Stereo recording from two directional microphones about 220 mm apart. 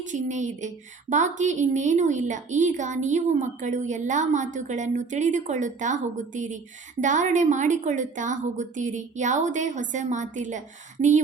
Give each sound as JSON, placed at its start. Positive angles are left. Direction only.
{"t": 0.0, "sound": "a woman's voice", "side_deg": -35}